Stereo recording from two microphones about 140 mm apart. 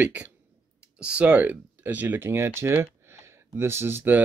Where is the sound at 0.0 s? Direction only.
10° right (ahead or behind).